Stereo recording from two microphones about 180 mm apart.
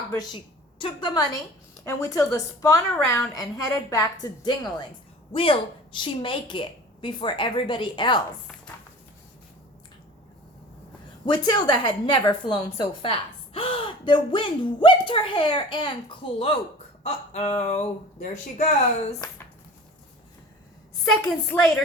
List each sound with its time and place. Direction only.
0.1 s a woman's voice: 25° left (ahead or behind)
11.3 s a woman's voice: 25° left (ahead or behind); by 18.6 s 40° left (ahead or behind)
19.2 s speech: 20° left (ahead or behind)
21.1 s a woman's voice: 5° left (ahead or behind)